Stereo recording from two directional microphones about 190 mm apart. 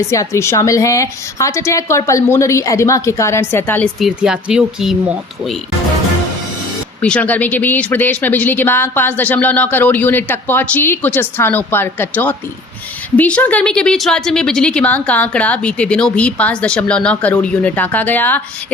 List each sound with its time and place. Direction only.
0.1 s speech: 15° left (ahead or behind)
4.0 s speech: 5° right (ahead or behind)
7.0 s speech: 5° left (ahead or behind)